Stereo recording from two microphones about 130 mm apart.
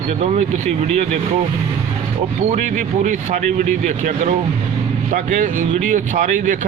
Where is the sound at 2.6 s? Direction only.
70° right (ahead or behind).